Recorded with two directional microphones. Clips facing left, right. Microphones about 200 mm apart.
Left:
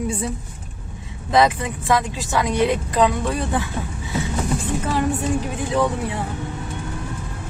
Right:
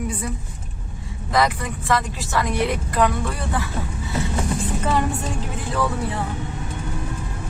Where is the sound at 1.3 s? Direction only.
20° left (ahead or behind).